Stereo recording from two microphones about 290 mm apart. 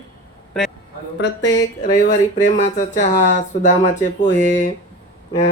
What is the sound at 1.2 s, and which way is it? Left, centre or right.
Speech, left.